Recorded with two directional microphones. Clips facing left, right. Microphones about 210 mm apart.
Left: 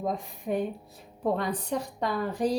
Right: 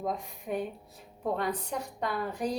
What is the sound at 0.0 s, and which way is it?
A woman's voice, 30° left (ahead or behind).